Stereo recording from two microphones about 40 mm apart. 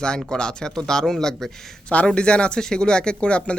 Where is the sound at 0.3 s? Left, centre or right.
Left.